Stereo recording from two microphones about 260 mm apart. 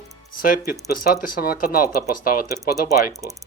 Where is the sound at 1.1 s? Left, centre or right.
Left.